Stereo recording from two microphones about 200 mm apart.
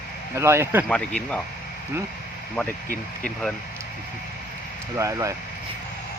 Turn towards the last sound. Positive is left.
turn(degrees=-15)  # may be behind; listen again after turning